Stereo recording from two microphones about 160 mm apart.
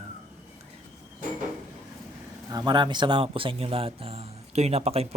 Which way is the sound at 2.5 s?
25° right (ahead or behind).